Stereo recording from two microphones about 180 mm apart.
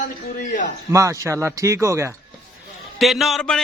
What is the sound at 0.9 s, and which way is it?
Speech, 15° right (ahead or behind).